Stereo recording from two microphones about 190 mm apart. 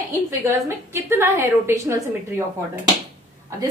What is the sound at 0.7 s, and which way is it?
A woman's voice, 15° right (ahead or behind).